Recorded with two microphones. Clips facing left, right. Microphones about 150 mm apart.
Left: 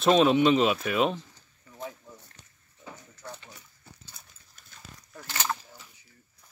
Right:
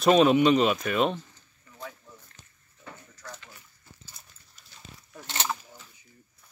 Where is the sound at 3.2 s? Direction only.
30° left (ahead or behind).